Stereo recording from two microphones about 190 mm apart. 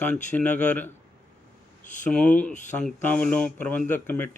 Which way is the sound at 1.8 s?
40° left (ahead or behind).